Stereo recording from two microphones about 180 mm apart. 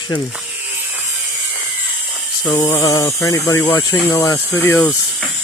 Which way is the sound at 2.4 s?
25° left (ahead or behind).